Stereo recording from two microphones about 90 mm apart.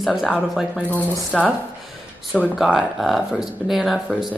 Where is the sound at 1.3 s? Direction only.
Centre (ahead or behind).